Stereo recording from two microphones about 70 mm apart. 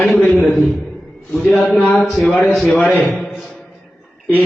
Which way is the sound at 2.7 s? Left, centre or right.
Left.